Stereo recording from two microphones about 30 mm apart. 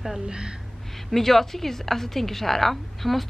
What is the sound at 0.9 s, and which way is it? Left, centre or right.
A woman's voice, centre.